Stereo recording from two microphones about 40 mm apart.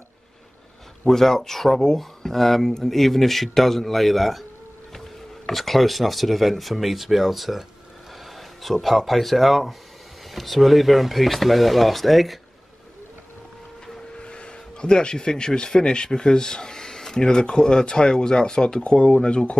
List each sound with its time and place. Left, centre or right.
1.0 s speech: centre
5.5 s speech: centre
14.1 s speech: left